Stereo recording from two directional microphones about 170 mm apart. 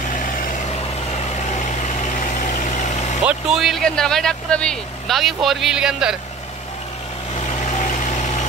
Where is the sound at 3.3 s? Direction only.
5° right (ahead or behind).